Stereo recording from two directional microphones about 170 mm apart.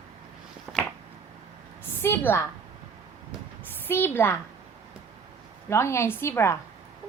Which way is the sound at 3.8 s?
10° left (ahead or behind).